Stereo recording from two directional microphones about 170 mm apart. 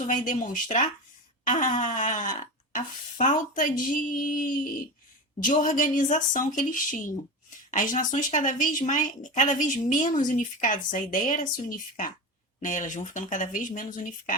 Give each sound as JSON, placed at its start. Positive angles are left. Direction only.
{"t": 0.1, "sound": "a woman's voice", "side_deg": 50}